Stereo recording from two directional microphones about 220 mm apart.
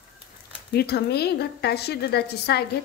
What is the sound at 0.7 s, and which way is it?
A woman's voice, 45° left (ahead or behind).